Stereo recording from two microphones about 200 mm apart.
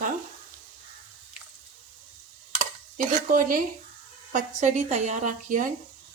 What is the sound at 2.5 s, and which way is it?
Stir, 40° right (ahead or behind).